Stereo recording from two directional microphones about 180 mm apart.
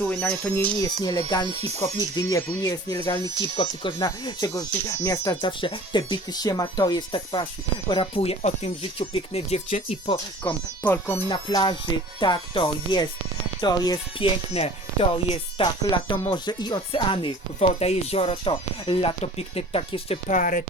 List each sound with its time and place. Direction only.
0.0 s speech: 5° left (ahead or behind); by 10.2 s 35° left (ahead or behind)
10.4 s speech: 10° left (ahead or behind)
11.3 s speech: 25° left (ahead or behind)
14.6 s speech: 35° left (ahead or behind)
20.3 s speech: 50° left (ahead or behind)